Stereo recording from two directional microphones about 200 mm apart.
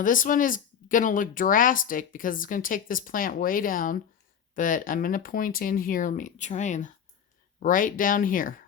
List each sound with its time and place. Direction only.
0.0 s speech: 40° left (ahead or behind)